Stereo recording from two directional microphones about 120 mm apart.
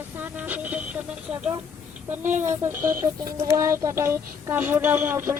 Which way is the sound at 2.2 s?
90° right.